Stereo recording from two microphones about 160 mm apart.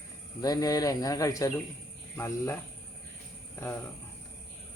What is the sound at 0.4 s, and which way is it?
Speech, 25° left (ahead or behind).